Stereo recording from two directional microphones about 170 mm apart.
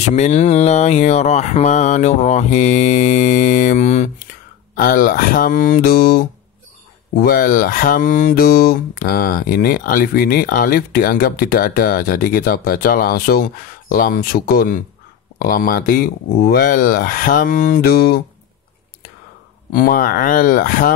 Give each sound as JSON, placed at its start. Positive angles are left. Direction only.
{"t": 0.1, "sound": "mantra", "side_deg": 40}
{"t": 4.7, "sound": "speech", "side_deg": 55}
{"t": 19.7, "sound": "speech", "side_deg": 55}